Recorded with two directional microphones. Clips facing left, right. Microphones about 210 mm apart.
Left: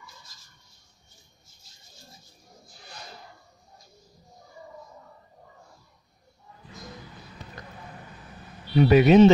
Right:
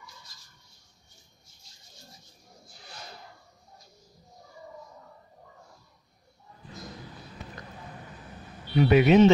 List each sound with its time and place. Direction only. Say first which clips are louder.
8.7 s speech: left 3 dB; 40° left (ahead or behind)